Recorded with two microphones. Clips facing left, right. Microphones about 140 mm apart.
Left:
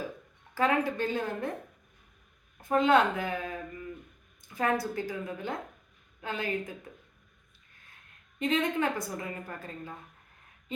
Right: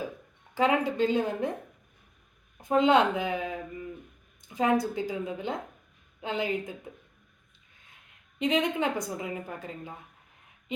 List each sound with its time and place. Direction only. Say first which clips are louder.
0.5 s a woman's voice: right 2 dB; 15° right (ahead or behind)
2.6 s speech: right 2 dB; 20° right (ahead or behind)
8.4 s a woman's voice: right 2 dB; 15° right (ahead or behind)